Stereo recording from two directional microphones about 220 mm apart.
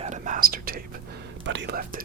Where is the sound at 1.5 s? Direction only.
50° right (ahead or behind).